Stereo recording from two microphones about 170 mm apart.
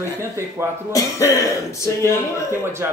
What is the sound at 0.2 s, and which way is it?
Speech, 15° right (ahead or behind).